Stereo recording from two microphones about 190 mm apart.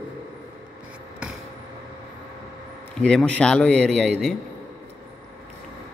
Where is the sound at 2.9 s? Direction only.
5° left (ahead or behind).